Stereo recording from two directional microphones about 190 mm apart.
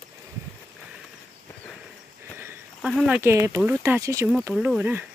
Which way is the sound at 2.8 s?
Centre (ahead or behind).